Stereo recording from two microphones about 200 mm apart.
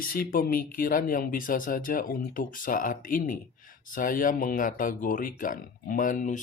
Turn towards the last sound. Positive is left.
turn(degrees=40)  # may be behind; listen again after turning